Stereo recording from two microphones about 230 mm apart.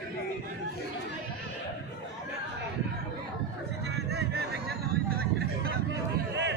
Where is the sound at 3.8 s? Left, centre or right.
Right.